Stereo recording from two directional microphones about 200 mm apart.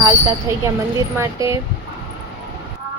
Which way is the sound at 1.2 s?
15° right (ahead or behind).